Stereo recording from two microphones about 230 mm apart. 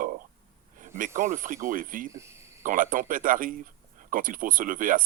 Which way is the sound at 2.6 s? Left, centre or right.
Right.